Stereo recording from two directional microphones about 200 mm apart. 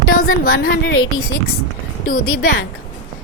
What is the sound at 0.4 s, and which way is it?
Speech, 50° left (ahead or behind).